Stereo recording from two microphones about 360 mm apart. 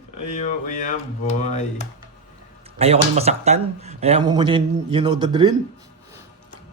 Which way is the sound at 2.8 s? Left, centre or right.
Centre.